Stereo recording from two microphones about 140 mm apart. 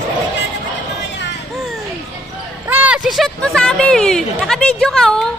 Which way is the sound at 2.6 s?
10° right (ahead or behind).